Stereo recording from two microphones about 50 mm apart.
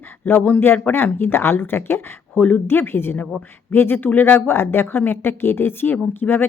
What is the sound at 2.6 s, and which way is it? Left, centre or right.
Speech, left.